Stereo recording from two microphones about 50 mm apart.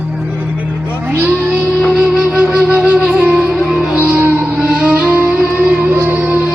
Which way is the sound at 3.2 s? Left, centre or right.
Right.